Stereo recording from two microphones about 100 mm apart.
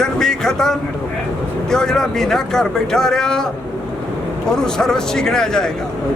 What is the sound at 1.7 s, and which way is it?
Speech, 5° left (ahead or behind).